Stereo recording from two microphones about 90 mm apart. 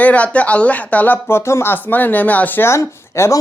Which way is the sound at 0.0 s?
15° left (ahead or behind).